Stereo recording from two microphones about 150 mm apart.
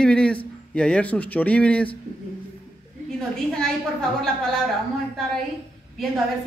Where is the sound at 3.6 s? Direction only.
5° left (ahead or behind).